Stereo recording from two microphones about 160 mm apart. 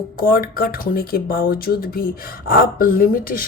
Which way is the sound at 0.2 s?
65° left (ahead or behind).